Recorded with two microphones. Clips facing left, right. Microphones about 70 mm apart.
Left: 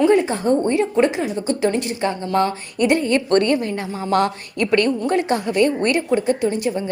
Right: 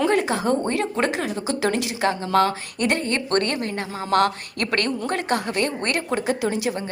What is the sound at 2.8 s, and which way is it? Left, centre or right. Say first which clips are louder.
A woman's voice: left 6 dB; right.